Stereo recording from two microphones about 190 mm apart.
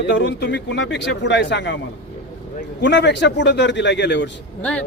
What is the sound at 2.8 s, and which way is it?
Speech, 70° left (ahead or behind).